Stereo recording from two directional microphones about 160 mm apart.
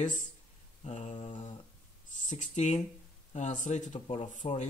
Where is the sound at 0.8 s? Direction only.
50° left (ahead or behind).